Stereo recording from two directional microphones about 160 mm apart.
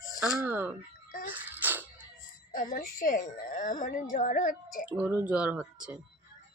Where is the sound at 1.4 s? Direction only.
10° right (ahead or behind).